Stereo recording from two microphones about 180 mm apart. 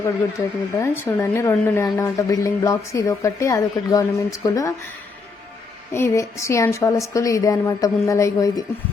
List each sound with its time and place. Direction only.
0.3 s speech: 15° left (ahead or behind)
5.9 s speech: 15° left (ahead or behind)